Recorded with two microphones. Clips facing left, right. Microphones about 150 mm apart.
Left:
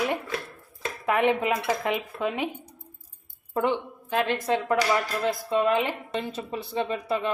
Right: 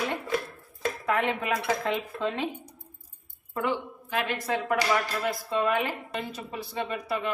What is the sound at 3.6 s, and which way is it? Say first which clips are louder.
A woman's voice: left 2 dB; 30° left (ahead or behind).